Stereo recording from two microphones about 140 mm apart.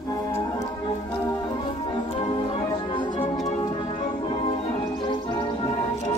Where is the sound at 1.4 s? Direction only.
35° left (ahead or behind).